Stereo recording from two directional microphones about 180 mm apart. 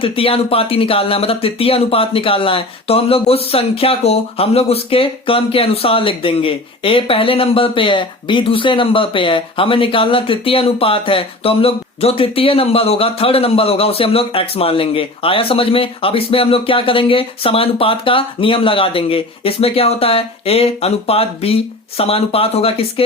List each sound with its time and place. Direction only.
0.0 s speech: 30° left (ahead or behind)